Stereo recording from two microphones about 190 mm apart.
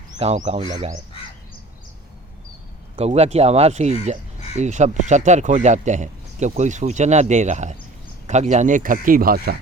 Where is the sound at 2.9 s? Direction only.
35° right (ahead or behind).